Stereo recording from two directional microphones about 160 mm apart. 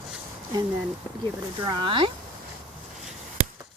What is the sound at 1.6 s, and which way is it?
Speech, 30° right (ahead or behind).